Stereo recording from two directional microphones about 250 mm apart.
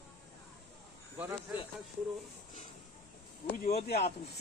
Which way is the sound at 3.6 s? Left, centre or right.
Left.